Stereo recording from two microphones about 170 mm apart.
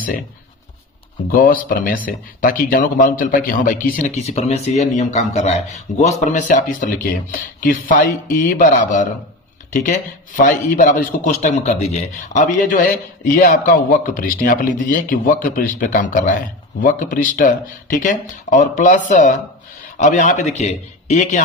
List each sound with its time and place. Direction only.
1.3 s speech: 55° left (ahead or behind)